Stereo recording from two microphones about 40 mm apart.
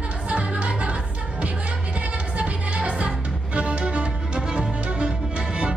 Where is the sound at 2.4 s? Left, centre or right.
Right.